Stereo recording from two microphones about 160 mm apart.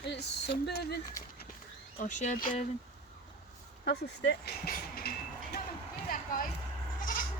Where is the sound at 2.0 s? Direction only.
55° left (ahead or behind).